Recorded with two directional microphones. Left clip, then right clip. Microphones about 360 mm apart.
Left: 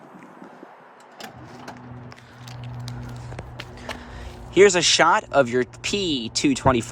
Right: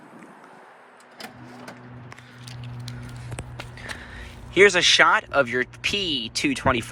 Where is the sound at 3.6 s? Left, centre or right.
Centre.